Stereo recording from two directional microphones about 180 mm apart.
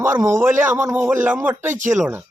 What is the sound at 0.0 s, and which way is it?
A man's voice, 15° right (ahead or behind).